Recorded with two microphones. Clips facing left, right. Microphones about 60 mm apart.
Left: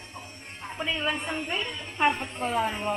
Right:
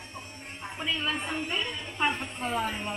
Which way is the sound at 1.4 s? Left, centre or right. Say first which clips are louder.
Left 1 dB; centre.